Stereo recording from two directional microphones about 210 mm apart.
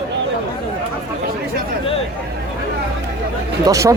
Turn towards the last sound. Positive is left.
turn(degrees=-15)  # may be behind; listen again after turning